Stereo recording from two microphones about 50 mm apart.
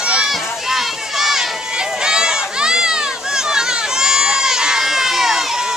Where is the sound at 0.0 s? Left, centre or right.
Centre.